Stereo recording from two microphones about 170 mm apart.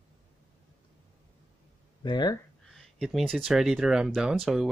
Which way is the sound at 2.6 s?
Centre (ahead or behind).